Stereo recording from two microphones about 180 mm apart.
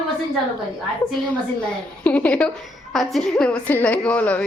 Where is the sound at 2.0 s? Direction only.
10° left (ahead or behind).